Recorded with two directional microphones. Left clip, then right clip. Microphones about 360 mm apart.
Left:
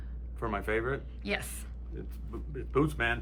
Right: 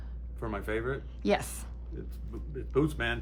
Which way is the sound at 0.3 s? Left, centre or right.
Centre.